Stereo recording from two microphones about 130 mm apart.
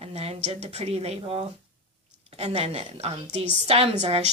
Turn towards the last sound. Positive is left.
turn(degrees=-55)  # may be behind; listen again after turning